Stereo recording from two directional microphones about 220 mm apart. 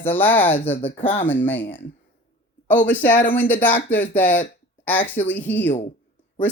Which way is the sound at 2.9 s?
10° left (ahead or behind).